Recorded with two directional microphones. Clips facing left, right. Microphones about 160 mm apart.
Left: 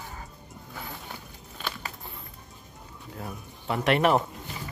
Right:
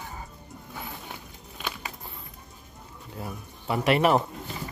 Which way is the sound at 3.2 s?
5° right (ahead or behind).